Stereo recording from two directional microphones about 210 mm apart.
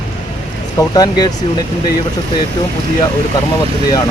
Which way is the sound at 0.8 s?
20° left (ahead or behind).